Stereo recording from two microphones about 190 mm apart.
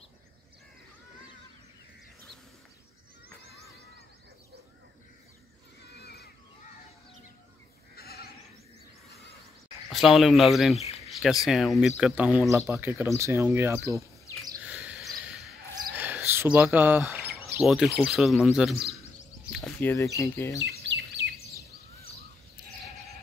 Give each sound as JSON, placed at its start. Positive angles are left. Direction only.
{"t": 5.8, "sound": "cat", "side_deg": 60}
{"t": 7.9, "sound": "goat", "side_deg": 55}
{"t": 9.8, "sound": "speech", "side_deg": 0}
{"t": 14.6, "sound": "a sound", "side_deg": -5}
{"t": 16.0, "sound": "speech", "side_deg": -10}
{"t": 19.8, "sound": "speech", "side_deg": 10}
{"t": 20.5, "sound": "bird", "side_deg": -65}